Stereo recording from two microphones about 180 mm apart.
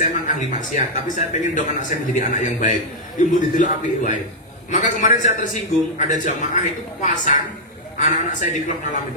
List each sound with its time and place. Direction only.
0.0 s a man's voice: 45° left (ahead or behind)